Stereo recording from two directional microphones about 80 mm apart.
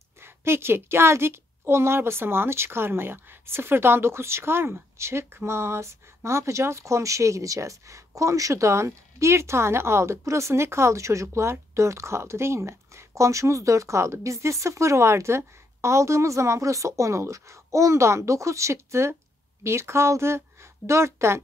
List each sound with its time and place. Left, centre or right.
0.2 s a woman's voice: right